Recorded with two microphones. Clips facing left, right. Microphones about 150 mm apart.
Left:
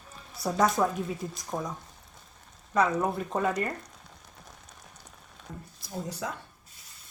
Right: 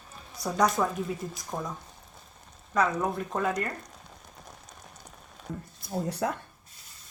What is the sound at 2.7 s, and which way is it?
Speech, centre (ahead or behind).